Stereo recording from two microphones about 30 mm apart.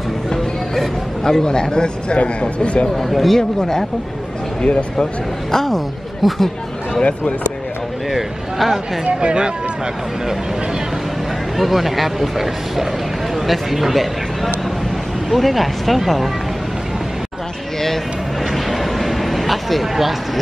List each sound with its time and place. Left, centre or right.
0.3 s a sound: centre
2.6 s speech: left
3.0 s speech: centre
3.3 s speech: centre
4.6 s speech: left
5.5 s speech: centre
7.0 s speech: left
8.1 s a sound: centre
9.0 s speech: right
11.5 s a man's voice: centre
18.5 s a sound: centre